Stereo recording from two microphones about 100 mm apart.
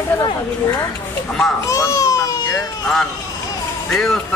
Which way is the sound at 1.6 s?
35° left (ahead or behind).